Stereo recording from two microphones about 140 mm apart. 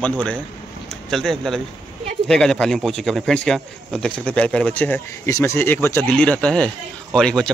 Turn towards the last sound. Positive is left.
turn(degrees=5)  # may be behind; listen again after turning